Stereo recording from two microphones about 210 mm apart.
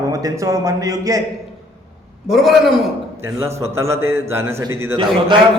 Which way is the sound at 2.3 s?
Centre (ahead or behind).